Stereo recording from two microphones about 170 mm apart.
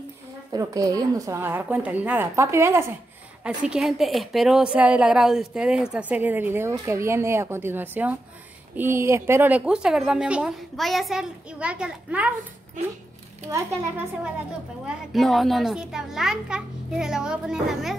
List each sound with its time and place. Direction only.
0.5 s a woman's voice: 20° right (ahead or behind)
13.5 s a woman's voice: 10° right (ahead or behind)
14.9 s a woman's voice: centre (ahead or behind)